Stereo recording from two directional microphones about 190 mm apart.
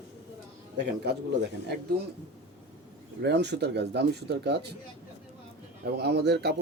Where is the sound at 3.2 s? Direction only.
60° right (ahead or behind).